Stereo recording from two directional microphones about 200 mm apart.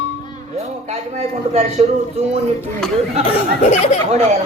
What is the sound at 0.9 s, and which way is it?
A man's voice, 30° right (ahead or behind).